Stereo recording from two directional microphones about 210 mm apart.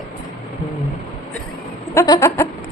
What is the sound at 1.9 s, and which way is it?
Speech, 10° left (ahead or behind).